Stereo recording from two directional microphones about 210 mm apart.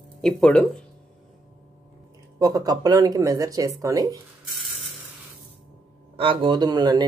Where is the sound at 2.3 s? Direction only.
15° right (ahead or behind).